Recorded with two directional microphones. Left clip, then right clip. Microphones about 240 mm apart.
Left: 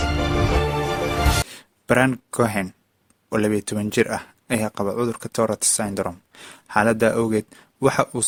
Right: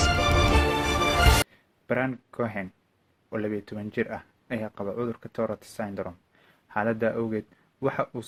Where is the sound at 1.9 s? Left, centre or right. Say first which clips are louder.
Left 9 dB; left.